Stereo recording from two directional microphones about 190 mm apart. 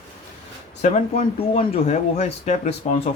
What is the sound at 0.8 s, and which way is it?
A man's voice, 40° left (ahead or behind).